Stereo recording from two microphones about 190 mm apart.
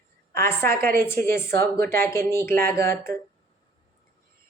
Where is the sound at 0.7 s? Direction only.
50° right (ahead or behind).